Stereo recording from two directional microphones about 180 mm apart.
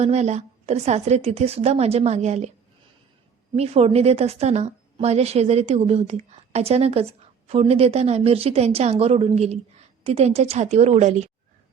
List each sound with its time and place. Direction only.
0.0 s a woman's voice: 40° right (ahead or behind)
3.5 s a woman's voice: 35° right (ahead or behind)